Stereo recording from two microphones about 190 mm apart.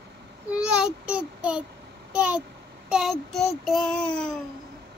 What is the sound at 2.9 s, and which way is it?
Child singing, centre (ahead or behind).